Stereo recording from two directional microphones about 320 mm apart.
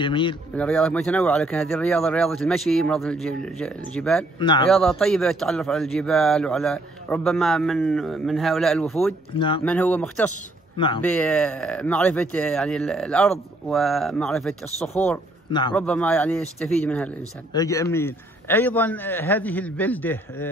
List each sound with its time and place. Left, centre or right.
0.0 s a man's voice: centre
0.6 s a man's voice: centre
4.4 s a man's voice: centre
4.8 s a man's voice: centre
9.3 s a man's voice: centre
9.7 s a man's voice: centre
15.0 s speech: centre
15.7 s a man's voice: centre